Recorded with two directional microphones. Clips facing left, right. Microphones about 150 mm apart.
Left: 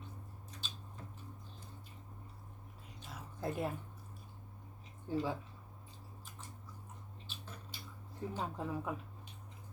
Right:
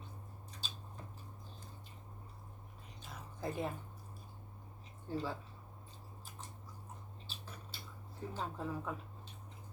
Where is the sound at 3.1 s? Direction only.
5° left (ahead or behind).